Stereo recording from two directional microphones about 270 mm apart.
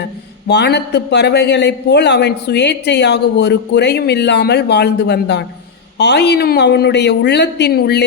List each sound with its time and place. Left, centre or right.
0.0 s speech: left